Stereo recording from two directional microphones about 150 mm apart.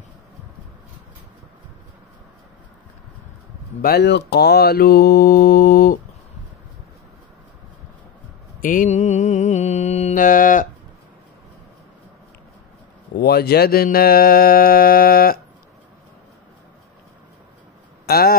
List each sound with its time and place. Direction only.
3.8 s mantra: 90° left; by 5.9 s 75° left (ahead or behind)
8.5 s mantra: 65° left (ahead or behind)
13.1 s mantra: 90° left
18.0 s speech: 90° left